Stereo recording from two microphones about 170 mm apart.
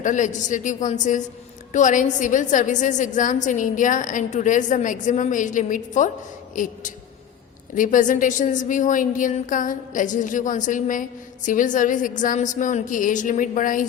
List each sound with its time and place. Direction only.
0.0 s a woman's voice: 45° left (ahead or behind)
7.8 s a woman's voice: 50° left (ahead or behind)